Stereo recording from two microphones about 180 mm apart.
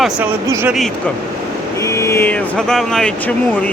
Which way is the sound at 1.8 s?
15° left (ahead or behind).